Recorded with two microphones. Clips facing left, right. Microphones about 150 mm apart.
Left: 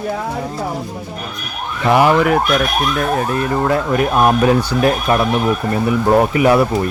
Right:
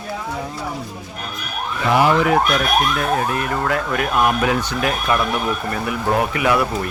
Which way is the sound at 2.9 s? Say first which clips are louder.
Left 3 dB; 35° left (ahead or behind).